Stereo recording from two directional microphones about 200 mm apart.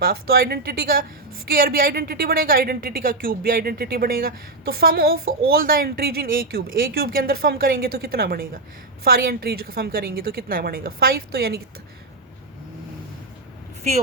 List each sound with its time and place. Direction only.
0.0 s a woman's voice: 50° right (ahead or behind)